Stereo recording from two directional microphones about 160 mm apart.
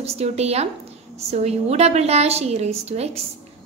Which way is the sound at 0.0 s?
40° right (ahead or behind).